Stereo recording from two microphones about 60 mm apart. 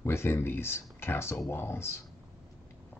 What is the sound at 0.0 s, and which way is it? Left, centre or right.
Speech, left.